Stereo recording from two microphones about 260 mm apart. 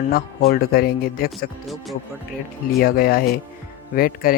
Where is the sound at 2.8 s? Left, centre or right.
Left.